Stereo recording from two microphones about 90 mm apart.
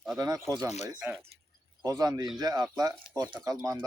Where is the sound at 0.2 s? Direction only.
35° right (ahead or behind).